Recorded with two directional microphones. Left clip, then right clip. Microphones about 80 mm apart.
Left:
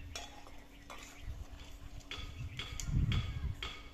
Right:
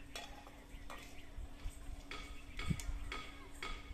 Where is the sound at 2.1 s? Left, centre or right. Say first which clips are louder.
Left 3 dB; left.